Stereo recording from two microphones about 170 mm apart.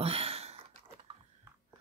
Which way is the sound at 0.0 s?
35° right (ahead or behind).